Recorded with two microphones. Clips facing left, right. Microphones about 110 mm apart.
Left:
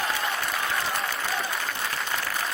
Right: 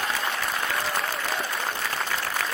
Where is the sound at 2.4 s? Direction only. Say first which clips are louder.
Right 1 dB; 90° right.